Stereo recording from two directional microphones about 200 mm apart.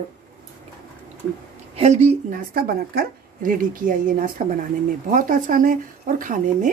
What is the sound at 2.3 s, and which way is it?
A woman's voice, 50° right (ahead or behind).